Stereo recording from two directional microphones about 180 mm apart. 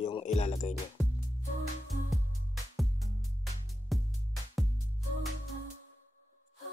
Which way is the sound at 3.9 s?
Centre (ahead or behind).